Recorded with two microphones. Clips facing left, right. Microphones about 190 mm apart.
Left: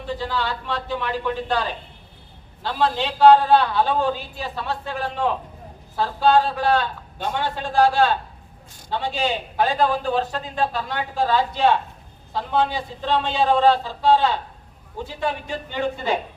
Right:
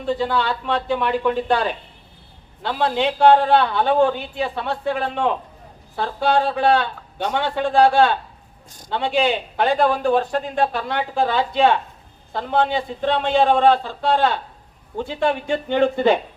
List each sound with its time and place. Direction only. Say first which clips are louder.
0.2 s a man's voice: right 5 dB; 60° right (ahead or behind)